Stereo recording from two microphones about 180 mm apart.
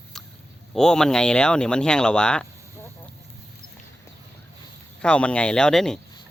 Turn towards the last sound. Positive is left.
turn(degrees=5)  # may be behind; listen again after turning